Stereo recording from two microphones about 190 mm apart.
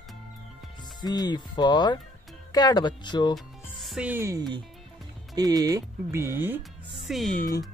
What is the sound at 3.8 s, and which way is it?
Speech, 5° right (ahead or behind).